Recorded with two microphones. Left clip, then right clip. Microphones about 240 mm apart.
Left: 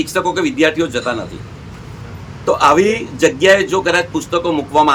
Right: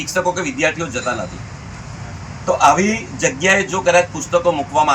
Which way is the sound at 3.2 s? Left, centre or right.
Centre.